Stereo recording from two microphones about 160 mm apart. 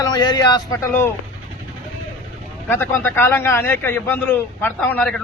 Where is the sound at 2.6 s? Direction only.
15° left (ahead or behind).